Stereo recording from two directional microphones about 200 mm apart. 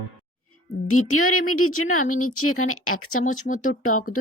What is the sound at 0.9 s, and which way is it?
Speech, 90° left.